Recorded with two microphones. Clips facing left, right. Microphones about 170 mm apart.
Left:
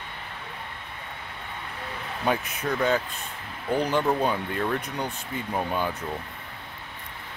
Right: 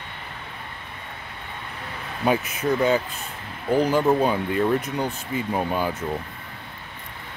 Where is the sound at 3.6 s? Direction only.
5° right (ahead or behind).